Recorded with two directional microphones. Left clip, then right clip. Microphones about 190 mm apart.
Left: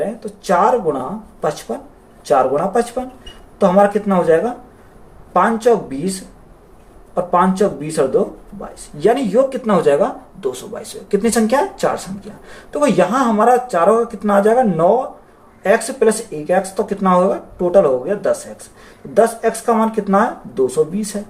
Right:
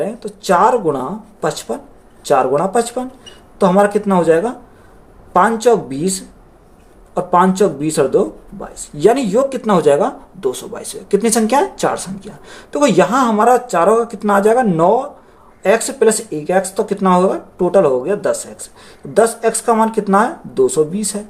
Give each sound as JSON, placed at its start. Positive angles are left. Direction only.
{"t": 0.0, "sound": "speech", "side_deg": -55}
{"t": 5.4, "sound": "speech", "side_deg": -50}